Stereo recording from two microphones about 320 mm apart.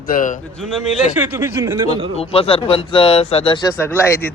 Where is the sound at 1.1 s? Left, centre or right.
Centre.